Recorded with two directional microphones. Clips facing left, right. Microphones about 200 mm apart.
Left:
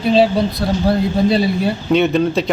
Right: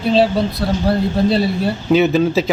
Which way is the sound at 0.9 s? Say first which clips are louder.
Left 1 dB; centre (ahead or behind).